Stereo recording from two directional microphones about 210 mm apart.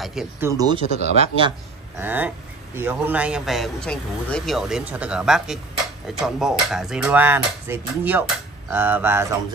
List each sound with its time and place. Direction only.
0.0 s a man's voice: centre (ahead or behind)
0.5 s speech: 20° right (ahead or behind)
0.9 s speech: 30° right (ahead or behind)
2.0 s a man's voice: 10° right (ahead or behind)